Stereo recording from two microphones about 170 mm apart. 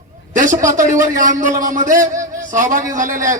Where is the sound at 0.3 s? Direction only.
50° right (ahead or behind).